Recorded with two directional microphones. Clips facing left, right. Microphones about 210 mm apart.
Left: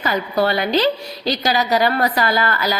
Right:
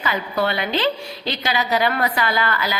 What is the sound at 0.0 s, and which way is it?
Speech, 40° left (ahead or behind).